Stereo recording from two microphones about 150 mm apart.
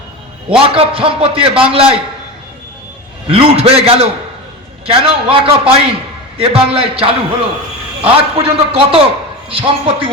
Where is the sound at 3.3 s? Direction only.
40° right (ahead or behind).